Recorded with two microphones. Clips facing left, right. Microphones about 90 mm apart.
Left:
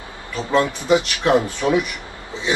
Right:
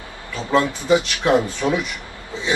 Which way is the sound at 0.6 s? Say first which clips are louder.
Even; 20° left (ahead or behind).